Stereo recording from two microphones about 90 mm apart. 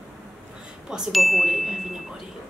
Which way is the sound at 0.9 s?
Centre (ahead or behind).